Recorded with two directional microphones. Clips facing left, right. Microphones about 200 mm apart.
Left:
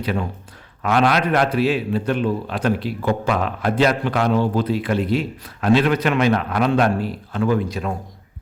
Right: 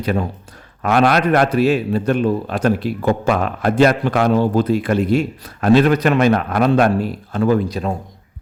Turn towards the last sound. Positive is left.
turn(degrees=-35)  # may be behind; listen again after turning